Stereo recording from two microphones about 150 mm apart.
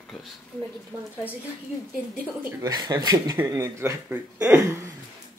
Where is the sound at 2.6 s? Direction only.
25° right (ahead or behind).